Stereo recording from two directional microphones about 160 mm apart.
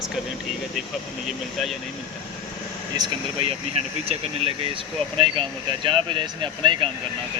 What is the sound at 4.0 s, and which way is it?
Speech, 40° right (ahead or behind).